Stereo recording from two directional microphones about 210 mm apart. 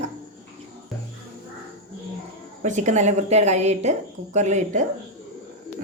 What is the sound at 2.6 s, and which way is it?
Speech, 35° right (ahead or behind).